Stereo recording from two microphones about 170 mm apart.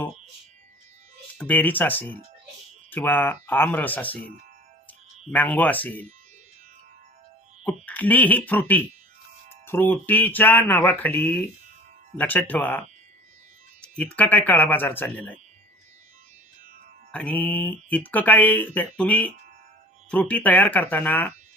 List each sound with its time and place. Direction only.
1.4 s speech: 10° left (ahead or behind)
7.6 s speech: 10° left (ahead or behind)
13.8 s speech: 5° left (ahead or behind)
17.1 s speech: 5° left (ahead or behind)